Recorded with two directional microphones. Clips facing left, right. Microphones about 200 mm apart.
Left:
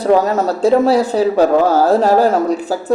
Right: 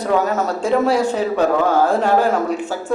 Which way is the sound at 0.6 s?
35° left (ahead or behind).